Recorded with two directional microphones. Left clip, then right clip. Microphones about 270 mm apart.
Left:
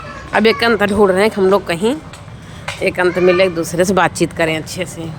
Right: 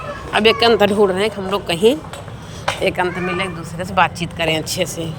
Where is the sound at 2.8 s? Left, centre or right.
Centre.